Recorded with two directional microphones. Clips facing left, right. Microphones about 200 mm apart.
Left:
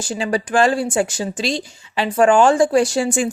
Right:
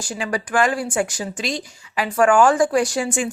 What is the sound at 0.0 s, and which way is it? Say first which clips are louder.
Speech: left 4 dB; 25° left (ahead or behind).